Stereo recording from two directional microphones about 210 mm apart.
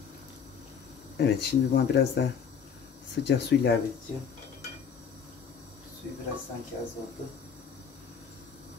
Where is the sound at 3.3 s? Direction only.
55° left (ahead or behind).